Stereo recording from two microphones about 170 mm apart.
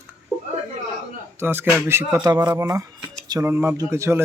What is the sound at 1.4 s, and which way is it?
Speech, 10° right (ahead or behind).